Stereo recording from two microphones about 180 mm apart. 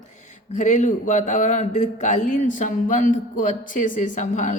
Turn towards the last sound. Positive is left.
turn(degrees=45)  # may be behind; listen again after turning